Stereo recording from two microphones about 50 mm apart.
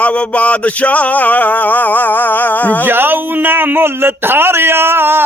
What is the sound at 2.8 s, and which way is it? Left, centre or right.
Speech, right.